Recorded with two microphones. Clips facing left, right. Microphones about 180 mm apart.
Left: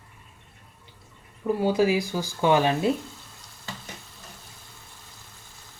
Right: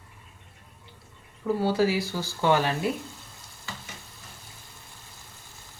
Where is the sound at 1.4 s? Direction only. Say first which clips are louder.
Left 2 dB; 15° left (ahead or behind).